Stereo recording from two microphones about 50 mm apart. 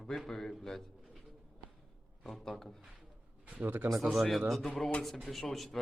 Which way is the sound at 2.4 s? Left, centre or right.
Centre.